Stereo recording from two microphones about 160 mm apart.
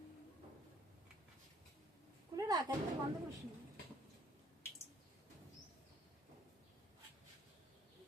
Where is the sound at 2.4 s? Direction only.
25° right (ahead or behind).